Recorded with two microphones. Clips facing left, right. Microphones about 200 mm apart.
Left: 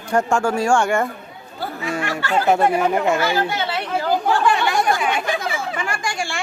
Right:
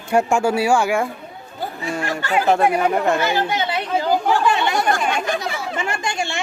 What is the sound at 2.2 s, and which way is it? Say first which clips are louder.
Speech: even; 15° right (ahead or behind).